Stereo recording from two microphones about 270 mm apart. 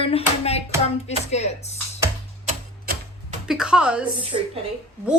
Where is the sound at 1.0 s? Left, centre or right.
Left.